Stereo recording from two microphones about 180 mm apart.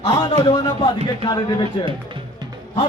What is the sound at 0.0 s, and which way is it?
A man's voice, 25° left (ahead or behind).